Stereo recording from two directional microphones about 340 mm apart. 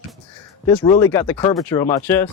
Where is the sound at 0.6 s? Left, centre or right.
Centre.